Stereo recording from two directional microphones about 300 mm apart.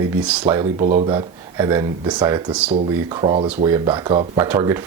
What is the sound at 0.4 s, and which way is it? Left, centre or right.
Speech, centre.